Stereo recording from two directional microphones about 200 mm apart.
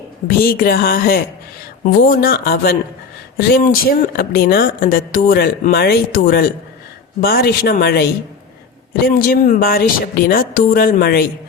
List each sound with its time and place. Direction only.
0.3 s speech: 45° left (ahead or behind)